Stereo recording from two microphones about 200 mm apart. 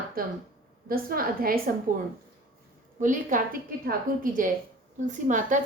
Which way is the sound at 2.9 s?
40° right (ahead or behind).